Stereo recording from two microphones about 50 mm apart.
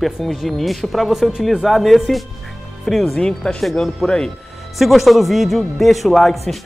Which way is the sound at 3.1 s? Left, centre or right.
Centre.